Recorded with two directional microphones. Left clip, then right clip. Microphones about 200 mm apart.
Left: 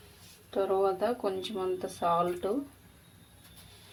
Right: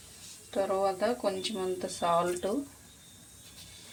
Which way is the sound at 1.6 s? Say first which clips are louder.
Left 2 dB; 10° left (ahead or behind).